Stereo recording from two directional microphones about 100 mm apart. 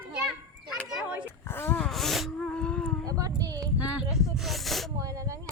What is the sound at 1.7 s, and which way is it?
Speech, 5° left (ahead or behind).